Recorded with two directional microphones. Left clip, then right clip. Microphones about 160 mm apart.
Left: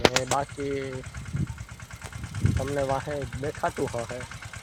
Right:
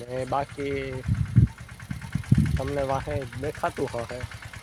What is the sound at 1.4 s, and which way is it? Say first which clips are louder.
Vehicle: right 9 dB; centre (ahead or behind).